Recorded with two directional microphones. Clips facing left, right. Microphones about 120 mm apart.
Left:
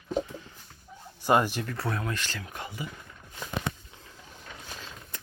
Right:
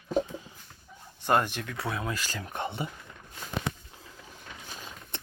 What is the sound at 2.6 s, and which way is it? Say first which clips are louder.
Speech: right 6 dB; 30° right (ahead or behind).